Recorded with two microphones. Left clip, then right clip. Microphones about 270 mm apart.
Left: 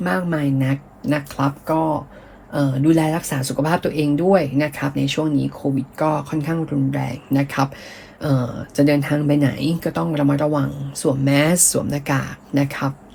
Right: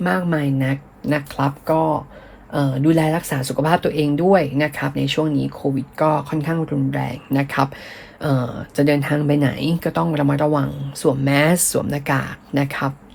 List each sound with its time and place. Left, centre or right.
0.0 s speech: right